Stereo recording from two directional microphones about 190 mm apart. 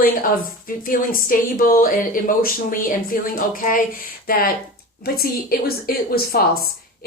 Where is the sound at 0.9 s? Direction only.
45° left (ahead or behind).